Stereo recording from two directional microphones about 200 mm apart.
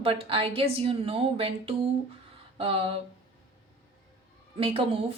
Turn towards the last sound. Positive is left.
turn(degrees=-30)  # may be behind; listen again after turning